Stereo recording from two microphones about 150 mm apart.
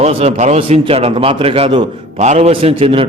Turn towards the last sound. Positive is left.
turn(degrees=-40)  # may be behind; listen again after turning